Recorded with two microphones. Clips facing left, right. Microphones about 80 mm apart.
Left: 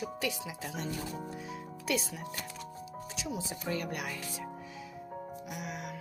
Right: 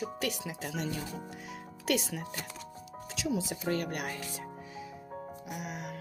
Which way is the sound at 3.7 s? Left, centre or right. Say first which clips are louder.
Right 2 dB; right.